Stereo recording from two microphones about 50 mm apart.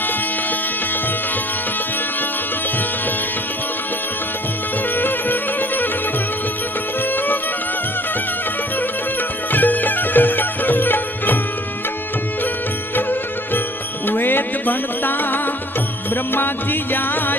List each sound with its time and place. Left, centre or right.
4.9 s music: left
9.5 s music: left
13.0 s music: left
16.9 s music: left